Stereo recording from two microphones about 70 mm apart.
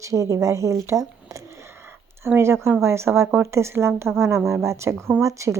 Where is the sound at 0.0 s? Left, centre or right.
Right.